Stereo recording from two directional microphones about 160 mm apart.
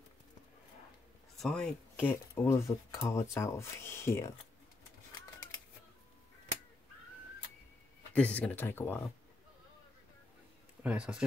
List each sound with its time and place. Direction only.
1.4 s speech: 5° left (ahead or behind)
8.1 s speech: 10° left (ahead or behind)
10.8 s speech: 5° right (ahead or behind)